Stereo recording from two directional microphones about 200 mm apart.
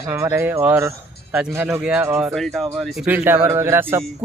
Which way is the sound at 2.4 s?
Centre (ahead or behind).